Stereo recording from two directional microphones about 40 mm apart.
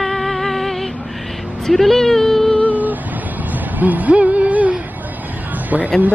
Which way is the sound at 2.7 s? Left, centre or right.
Right.